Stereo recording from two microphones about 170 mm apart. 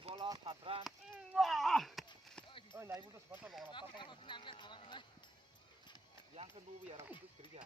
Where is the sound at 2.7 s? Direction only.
15° right (ahead or behind).